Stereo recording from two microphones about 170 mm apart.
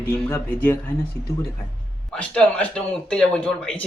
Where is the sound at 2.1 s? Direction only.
5° left (ahead or behind).